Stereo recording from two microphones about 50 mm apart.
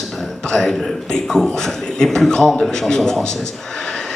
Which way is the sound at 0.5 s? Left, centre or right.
Centre.